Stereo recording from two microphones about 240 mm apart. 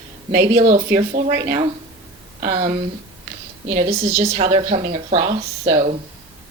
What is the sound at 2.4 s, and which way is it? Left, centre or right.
Speech, right.